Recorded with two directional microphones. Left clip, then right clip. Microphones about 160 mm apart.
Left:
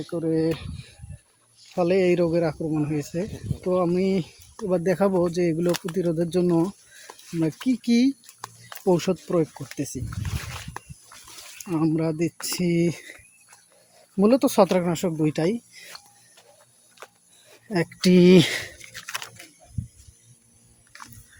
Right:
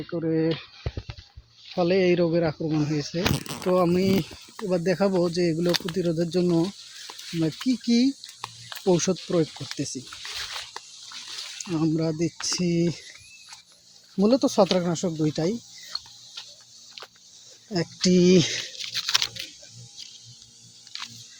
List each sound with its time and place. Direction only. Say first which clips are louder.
0.1 s speech: left 1 dB; 15° left (ahead or behind)
1.8 s speech: left 1 dB; 10° left (ahead or behind)
3.6 s speech: even; centre (ahead or behind)
5.6 s speech: even; 10° right (ahead or behind)
5.9 s speech: left 1 dB; 10° left (ahead or behind)
11.7 s speech: left 2 dB; 10° left (ahead or behind)
14.2 s speech: left 2 dB; 10° left (ahead or behind)
15.9 s music: right 10 dB; 25° right (ahead or behind)
17.7 s speech: left 2 dB; 15° left (ahead or behind)
18.8 s a sound: right 10 dB; 5° left (ahead or behind)